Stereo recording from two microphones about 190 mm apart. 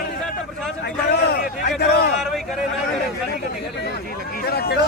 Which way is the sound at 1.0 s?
60° left (ahead or behind).